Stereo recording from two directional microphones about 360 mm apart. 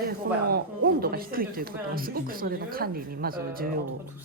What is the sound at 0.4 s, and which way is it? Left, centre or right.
Speech, right.